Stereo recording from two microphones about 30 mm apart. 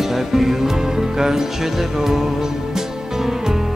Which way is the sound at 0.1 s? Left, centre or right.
Centre.